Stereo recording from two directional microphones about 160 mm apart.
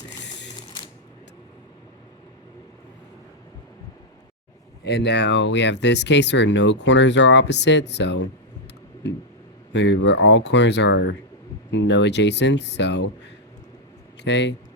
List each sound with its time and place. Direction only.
4.8 s speech: 90° left
9.7 s speech: 90° left
14.2 s speech: 90° left